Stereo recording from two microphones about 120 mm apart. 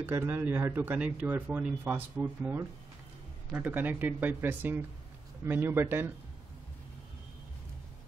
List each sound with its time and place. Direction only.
0.0 s speech: 15° right (ahead or behind)